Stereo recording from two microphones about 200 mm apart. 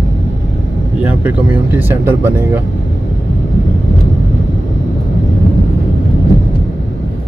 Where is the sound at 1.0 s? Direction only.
10° right (ahead or behind).